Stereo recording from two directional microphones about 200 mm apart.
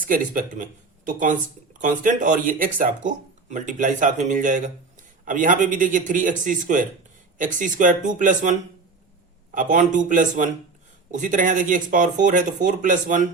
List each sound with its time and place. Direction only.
0.0 s speech: 45° right (ahead or behind)
9.6 s speech: 40° right (ahead or behind)